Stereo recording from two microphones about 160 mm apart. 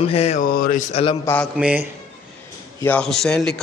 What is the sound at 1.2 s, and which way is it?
Speech, 10° left (ahead or behind).